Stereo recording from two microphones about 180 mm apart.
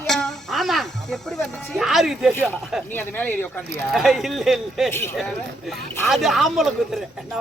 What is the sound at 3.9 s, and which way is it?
Speech, centre (ahead or behind).